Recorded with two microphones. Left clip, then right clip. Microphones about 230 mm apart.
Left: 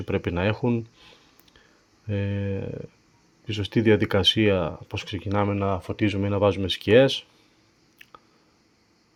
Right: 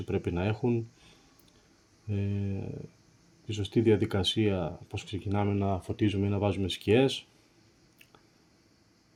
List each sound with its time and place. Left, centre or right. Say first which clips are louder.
0.1 s speech: left 7 dB; left